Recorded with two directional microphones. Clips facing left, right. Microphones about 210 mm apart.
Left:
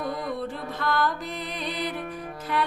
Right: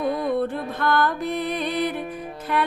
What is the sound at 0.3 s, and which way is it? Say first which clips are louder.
Music: right 7 dB; 55° right (ahead or behind).